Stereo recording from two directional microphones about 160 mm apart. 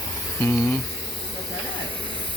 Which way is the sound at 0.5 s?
10° left (ahead or behind).